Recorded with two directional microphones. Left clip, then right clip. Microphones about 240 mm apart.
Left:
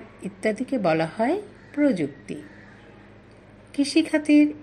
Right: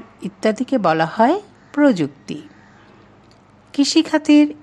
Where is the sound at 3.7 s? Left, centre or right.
Right.